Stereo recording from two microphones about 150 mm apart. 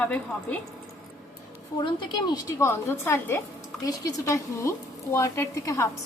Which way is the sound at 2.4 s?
15° left (ahead or behind).